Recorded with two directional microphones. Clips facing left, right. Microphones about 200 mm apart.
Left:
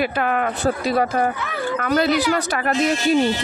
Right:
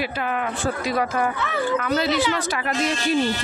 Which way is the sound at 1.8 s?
55° left (ahead or behind).